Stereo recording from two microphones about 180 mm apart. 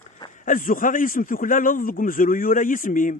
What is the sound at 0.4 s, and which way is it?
A man's voice, 45° left (ahead or behind).